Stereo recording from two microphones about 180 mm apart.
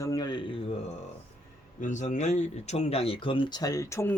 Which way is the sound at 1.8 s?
45° left (ahead or behind).